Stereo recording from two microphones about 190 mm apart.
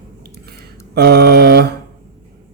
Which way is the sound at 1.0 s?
55° right (ahead or behind).